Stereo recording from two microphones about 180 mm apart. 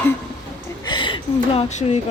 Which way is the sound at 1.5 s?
40° left (ahead or behind).